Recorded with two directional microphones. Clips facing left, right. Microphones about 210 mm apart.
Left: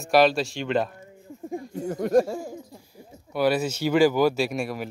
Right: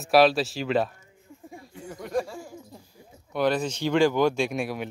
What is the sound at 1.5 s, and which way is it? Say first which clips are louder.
Speech: left 11 dB; 40° left (ahead or behind).